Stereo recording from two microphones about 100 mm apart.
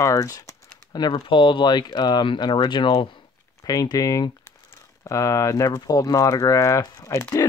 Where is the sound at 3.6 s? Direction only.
40° left (ahead or behind).